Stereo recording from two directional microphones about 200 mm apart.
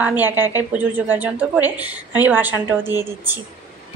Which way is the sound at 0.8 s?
10° right (ahead or behind).